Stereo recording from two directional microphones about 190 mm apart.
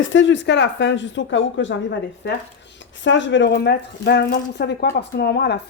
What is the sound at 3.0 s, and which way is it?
Speech, 75° left (ahead or behind).